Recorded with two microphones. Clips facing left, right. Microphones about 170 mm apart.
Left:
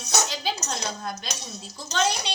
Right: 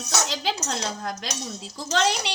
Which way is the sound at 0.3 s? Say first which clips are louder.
Right 2 dB; 90° right.